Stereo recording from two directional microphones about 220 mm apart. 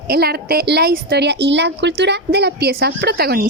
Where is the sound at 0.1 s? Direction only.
45° right (ahead or behind).